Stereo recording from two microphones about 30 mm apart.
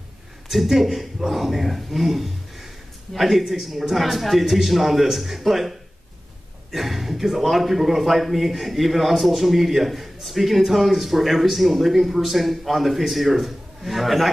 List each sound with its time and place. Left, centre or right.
0.5 s speech: centre